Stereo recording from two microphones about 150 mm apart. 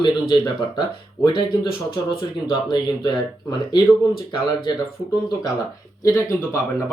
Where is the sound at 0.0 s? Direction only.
30° left (ahead or behind).